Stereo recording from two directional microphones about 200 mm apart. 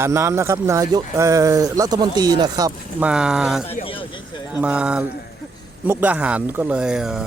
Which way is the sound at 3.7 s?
30° left (ahead or behind).